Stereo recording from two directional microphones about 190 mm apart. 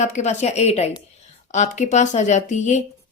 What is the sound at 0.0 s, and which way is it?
A woman's voice, 40° left (ahead or behind).